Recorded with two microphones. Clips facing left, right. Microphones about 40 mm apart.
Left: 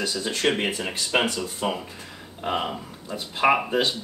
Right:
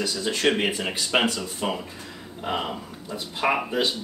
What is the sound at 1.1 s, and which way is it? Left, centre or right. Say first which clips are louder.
Speech: right 1 dB; centre.